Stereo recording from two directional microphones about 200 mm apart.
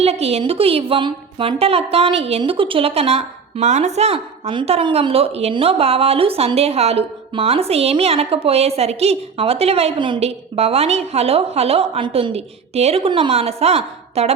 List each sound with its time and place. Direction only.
0.0 s a woman's voice: 30° right (ahead or behind)